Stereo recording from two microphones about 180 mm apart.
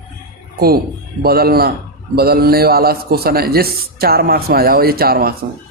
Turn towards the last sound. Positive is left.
turn(degrees=-55)  # may be behind; listen again after turning